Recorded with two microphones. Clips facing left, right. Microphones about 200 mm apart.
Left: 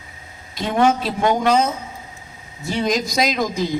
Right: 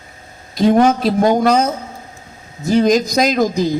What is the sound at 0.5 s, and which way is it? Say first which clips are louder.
Speech: right 6 dB; 40° right (ahead or behind).